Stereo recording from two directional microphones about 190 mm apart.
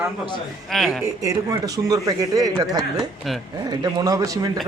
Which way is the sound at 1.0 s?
15° right (ahead or behind).